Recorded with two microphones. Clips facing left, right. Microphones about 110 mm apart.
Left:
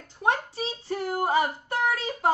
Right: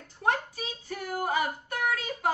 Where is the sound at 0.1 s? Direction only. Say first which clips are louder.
Left 2 dB; 20° left (ahead or behind).